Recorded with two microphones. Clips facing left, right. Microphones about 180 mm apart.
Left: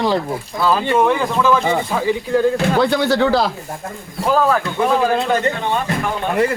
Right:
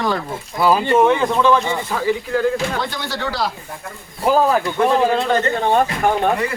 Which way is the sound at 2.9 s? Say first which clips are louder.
Left 11 dB; 65° left (ahead or behind).